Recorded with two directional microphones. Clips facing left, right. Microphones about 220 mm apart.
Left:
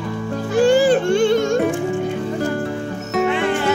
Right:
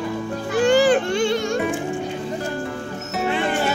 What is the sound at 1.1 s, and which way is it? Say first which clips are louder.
Music: left 5 dB; 50° left (ahead or behind).